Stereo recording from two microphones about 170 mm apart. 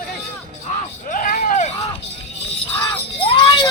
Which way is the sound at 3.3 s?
30° left (ahead or behind).